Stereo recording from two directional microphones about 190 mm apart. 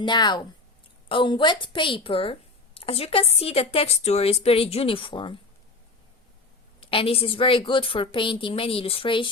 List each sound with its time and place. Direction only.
0.0 s a woman's voice: 25° left (ahead or behind)
6.7 s a woman's voice: 30° left (ahead or behind)